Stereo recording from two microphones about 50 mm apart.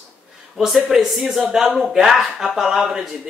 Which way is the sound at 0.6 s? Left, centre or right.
Centre.